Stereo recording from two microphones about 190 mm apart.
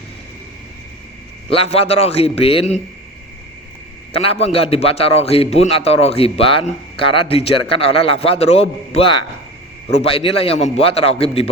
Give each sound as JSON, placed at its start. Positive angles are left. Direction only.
{"t": 1.5, "sound": "a man's voice", "side_deg": 30}
{"t": 4.1, "sound": "a man's voice", "side_deg": 30}